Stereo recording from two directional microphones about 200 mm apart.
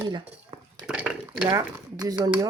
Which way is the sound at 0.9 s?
5° right (ahead or behind).